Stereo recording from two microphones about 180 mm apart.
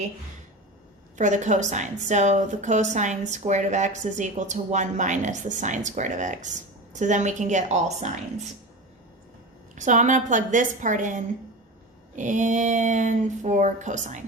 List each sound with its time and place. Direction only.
1.1 s a woman's voice: 40° right (ahead or behind)
9.7 s speech: 45° right (ahead or behind)